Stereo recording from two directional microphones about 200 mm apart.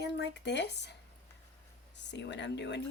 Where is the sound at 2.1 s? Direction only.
60° left (ahead or behind).